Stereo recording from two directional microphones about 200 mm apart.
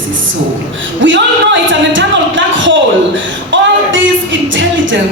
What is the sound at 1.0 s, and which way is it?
A woman's voice, 70° right (ahead or behind).